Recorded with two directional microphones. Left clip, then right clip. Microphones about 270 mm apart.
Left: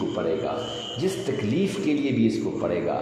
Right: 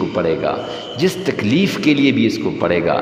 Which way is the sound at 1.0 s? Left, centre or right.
Right.